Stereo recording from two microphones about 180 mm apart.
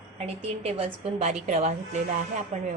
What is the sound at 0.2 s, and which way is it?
A woman's voice, 35° right (ahead or behind).